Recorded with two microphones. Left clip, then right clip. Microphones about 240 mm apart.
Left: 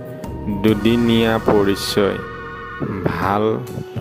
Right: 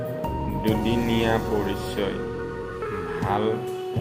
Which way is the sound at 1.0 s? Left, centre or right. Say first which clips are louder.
Left 8 dB; left.